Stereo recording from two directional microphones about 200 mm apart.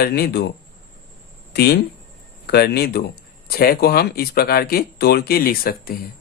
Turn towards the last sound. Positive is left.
turn(degrees=45)  # may be behind; listen again after turning